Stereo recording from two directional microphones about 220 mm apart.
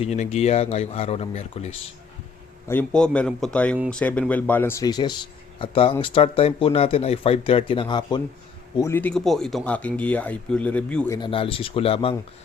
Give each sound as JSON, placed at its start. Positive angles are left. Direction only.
{"t": 0.0, "sound": "speech", "side_deg": 30}
{"t": 2.6, "sound": "speech", "side_deg": 5}
{"t": 8.8, "sound": "speech", "side_deg": 10}
{"t": 11.2, "sound": "speech", "side_deg": 25}